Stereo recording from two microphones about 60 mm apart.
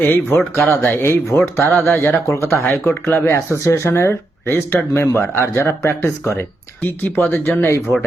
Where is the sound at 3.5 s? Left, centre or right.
Left.